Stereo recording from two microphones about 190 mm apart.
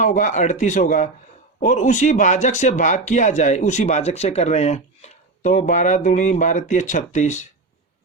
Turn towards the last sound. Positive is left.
turn(degrees=40)  # may be behind; listen again after turning